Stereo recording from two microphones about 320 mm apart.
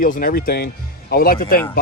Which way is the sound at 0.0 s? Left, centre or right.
Left.